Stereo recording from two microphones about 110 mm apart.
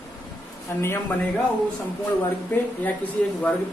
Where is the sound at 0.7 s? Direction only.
20° left (ahead or behind).